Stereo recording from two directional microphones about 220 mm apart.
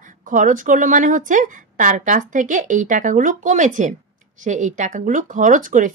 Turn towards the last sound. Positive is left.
turn(degrees=-35)  # may be behind; listen again after turning